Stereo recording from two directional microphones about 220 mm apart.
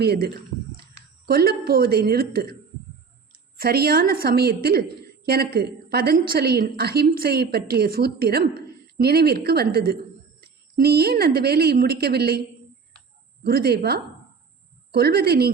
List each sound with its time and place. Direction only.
0.0 s a woman's voice: 45° right (ahead or behind)
1.3 s a woman's voice: 45° right (ahead or behind)
3.6 s a woman's voice: 45° right (ahead or behind)
13.4 s a woman's voice: 45° right (ahead or behind)